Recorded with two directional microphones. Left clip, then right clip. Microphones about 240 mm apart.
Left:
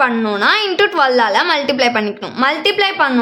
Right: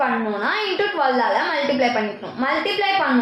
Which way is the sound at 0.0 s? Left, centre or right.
Left.